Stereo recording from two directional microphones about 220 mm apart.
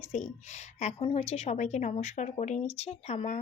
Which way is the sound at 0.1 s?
30° left (ahead or behind).